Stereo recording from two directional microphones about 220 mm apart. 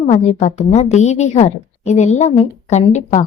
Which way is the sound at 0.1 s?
30° left (ahead or behind).